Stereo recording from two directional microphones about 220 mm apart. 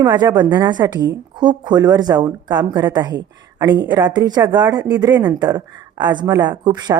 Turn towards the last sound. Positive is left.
turn(degrees=-20)  # may be behind; listen again after turning